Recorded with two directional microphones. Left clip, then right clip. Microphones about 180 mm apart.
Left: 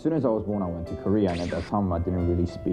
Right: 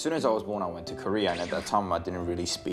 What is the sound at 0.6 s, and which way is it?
Speech, 25° right (ahead or behind).